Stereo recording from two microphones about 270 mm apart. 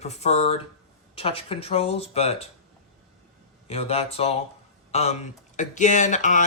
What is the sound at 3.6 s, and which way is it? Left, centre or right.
Speech, left.